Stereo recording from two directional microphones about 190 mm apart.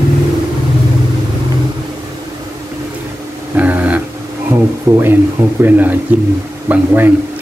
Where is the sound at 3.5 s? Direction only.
10° right (ahead or behind).